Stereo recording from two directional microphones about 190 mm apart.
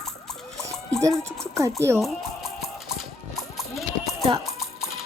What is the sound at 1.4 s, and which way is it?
Speech, 15° right (ahead or behind).